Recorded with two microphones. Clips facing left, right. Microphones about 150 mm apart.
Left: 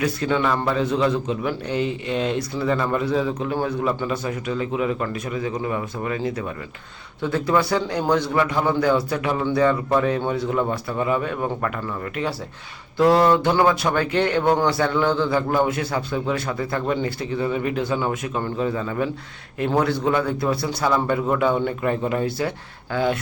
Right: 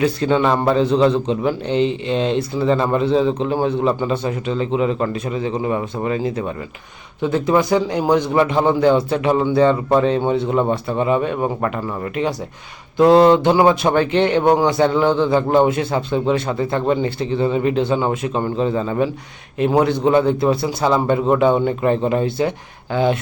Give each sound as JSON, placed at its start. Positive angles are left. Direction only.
{"t": 0.0, "sound": "speech", "side_deg": -25}
{"t": 13.0, "sound": "speech", "side_deg": -20}